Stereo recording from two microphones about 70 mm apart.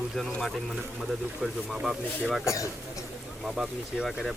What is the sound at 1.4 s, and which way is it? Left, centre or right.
Speech, centre.